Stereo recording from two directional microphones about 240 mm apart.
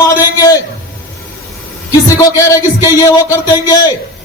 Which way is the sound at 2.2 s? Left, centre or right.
Centre.